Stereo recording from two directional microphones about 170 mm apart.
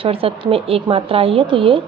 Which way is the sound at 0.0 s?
35° right (ahead or behind).